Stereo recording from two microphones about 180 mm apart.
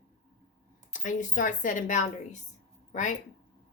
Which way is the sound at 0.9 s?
45° left (ahead or behind).